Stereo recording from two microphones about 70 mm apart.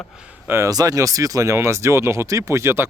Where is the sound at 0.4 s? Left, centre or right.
Right.